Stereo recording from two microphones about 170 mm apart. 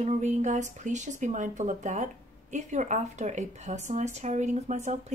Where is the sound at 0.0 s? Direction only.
45° right (ahead or behind).